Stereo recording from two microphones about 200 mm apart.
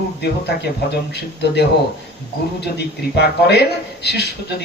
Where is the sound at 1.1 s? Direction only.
55° left (ahead or behind).